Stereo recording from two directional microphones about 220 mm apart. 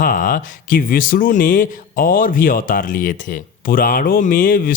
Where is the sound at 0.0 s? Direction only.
40° left (ahead or behind).